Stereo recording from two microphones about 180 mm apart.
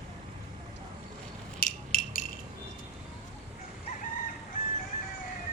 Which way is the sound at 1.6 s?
55° left (ahead or behind).